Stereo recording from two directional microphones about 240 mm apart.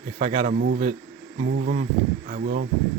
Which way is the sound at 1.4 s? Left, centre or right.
Right.